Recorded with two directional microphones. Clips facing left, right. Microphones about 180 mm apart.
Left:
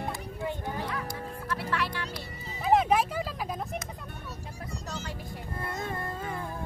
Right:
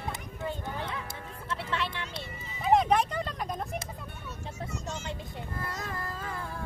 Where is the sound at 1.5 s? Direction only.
25° right (ahead or behind).